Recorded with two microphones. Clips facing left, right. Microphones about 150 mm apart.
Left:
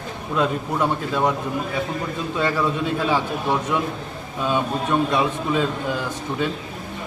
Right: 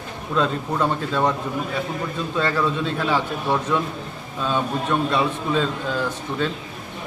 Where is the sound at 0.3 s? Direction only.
10° left (ahead or behind).